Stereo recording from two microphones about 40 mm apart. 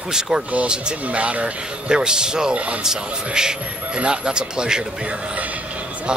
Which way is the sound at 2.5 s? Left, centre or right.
Right.